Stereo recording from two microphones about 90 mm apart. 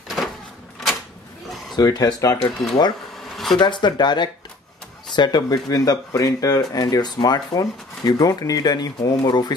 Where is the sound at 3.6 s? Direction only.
60° left (ahead or behind).